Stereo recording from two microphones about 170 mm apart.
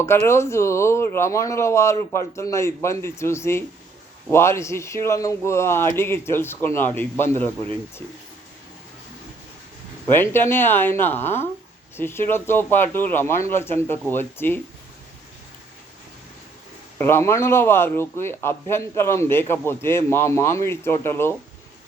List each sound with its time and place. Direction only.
0.0 s a man's voice: 15° left (ahead or behind)
10.1 s a man's voice: 15° left (ahead or behind)
17.0 s a man's voice: 15° left (ahead or behind)